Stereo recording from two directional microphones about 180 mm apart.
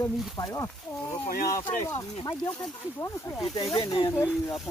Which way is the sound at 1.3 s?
55° left (ahead or behind).